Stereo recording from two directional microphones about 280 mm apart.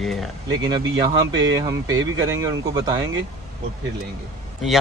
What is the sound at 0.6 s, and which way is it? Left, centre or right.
Speech, centre.